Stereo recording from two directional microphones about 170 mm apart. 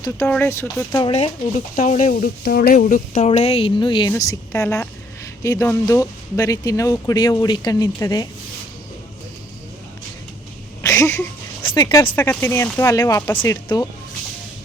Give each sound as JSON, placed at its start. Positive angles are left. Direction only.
{"t": 0.3, "sound": "speech", "side_deg": 10}
{"t": 1.0, "sound": "speech", "side_deg": 35}
{"t": 2.4, "sound": "speech", "side_deg": 60}
{"t": 3.2, "sound": "speech", "side_deg": 35}
{"t": 10.8, "sound": "a sound", "side_deg": 20}
{"t": 11.6, "sound": "speech", "side_deg": 30}